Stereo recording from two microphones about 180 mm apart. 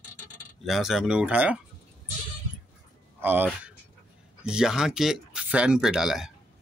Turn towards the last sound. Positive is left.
turn(degrees=0)  # may be behind; listen again after turning